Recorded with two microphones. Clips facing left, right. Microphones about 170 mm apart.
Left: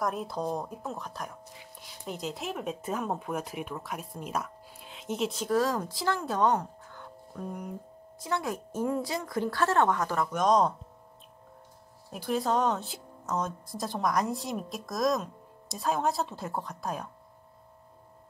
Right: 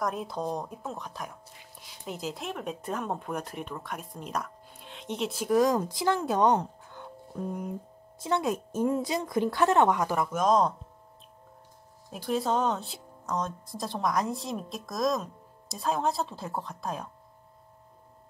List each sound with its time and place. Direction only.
0.0 s speech: centre (ahead or behind)
5.4 s a woman's voice: 15° right (ahead or behind)
12.1 s speech: centre (ahead or behind)